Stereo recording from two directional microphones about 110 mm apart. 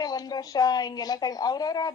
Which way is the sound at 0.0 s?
35° left (ahead or behind).